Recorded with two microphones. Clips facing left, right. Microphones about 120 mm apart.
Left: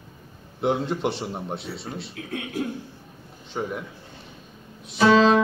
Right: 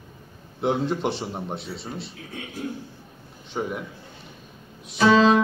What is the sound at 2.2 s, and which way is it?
Speech, 80° left.